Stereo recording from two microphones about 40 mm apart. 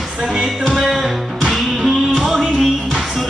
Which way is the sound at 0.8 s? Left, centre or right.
Centre.